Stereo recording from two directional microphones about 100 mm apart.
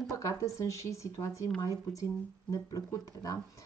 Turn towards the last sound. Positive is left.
turn(degrees=35)  # may be behind; listen again after turning